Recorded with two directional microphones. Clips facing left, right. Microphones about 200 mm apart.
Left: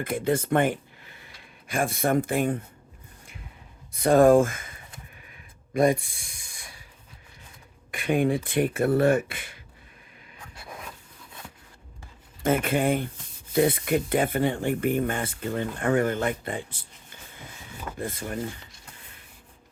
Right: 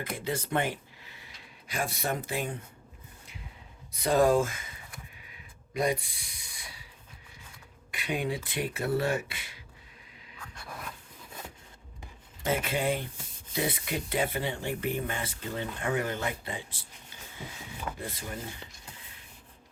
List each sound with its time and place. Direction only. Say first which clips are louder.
0.0 s speech: left 8 dB; 50° left (ahead or behind)
3.9 s speech: left 7 dB; 50° left (ahead or behind)
5.7 s speech: left 7 dB; 50° left (ahead or behind)
7.9 s speech: left 8 dB; 50° left (ahead or behind)
12.4 s speech: left 6 dB; 50° left (ahead or behind)
18.0 s speech: left 6 dB; 50° left (ahead or behind)